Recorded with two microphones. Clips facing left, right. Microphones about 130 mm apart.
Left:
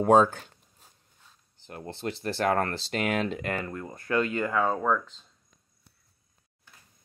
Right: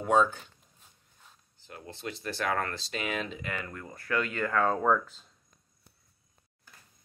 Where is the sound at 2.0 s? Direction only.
35° left (ahead or behind).